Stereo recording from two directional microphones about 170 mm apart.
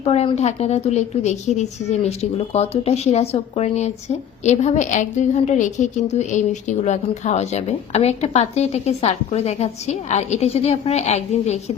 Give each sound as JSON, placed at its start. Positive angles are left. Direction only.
{"t": 0.0, "sound": "a woman's voice", "side_deg": 35}